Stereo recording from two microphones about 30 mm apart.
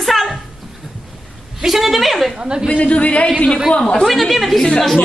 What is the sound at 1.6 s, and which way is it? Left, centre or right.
Speech, centre.